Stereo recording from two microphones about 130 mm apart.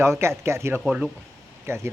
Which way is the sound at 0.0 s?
20° right (ahead or behind).